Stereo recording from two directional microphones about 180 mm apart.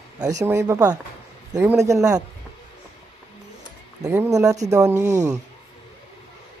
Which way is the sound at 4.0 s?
15° right (ahead or behind).